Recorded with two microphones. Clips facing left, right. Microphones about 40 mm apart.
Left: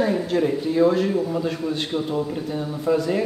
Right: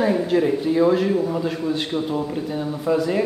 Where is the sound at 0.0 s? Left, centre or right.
Centre.